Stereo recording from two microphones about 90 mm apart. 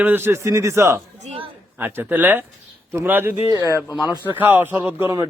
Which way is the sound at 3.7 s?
35° left (ahead or behind).